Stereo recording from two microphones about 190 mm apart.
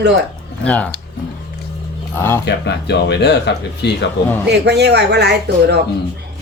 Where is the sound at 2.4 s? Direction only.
60° left (ahead or behind).